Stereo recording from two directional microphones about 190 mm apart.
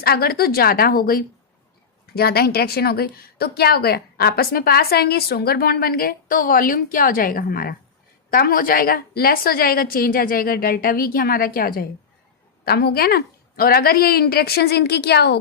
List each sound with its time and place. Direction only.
0.0 s a woman's voice: 55° left (ahead or behind)